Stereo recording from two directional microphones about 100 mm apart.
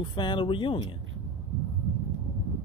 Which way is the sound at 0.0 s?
50° left (ahead or behind).